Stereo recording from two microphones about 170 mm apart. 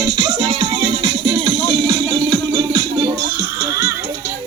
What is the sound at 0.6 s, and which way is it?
Music, 25° right (ahead or behind).